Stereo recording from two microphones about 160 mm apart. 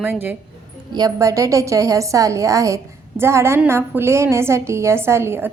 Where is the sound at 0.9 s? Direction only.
20° right (ahead or behind).